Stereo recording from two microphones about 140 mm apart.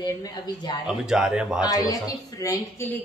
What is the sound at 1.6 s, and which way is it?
A woman's voice, 25° left (ahead or behind).